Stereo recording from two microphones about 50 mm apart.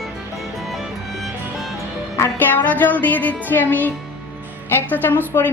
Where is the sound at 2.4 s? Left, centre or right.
Left.